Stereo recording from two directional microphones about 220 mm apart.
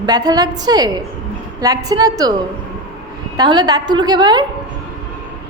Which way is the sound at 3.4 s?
20° right (ahead or behind).